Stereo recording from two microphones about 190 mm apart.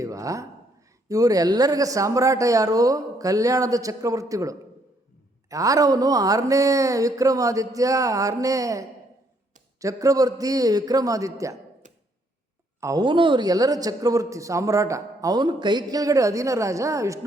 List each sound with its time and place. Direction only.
0.0 s a sound: 15° right (ahead or behind)
1.0 s a man's voice: 20° right (ahead or behind)
12.8 s a man's voice: 20° right (ahead or behind)